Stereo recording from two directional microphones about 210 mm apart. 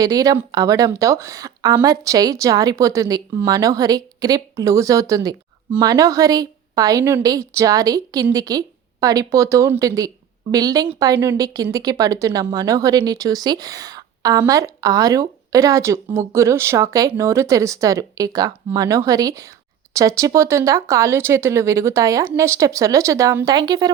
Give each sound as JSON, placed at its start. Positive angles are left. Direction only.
{"t": 0.0, "sound": "speech", "side_deg": -15}